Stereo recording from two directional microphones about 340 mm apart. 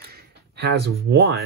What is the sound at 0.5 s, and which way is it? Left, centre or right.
Speech, right.